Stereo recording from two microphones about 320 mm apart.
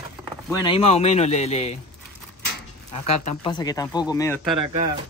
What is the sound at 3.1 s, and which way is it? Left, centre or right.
Speech, centre.